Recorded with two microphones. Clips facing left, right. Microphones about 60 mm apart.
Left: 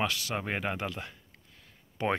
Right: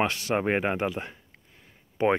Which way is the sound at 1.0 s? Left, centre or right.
Right.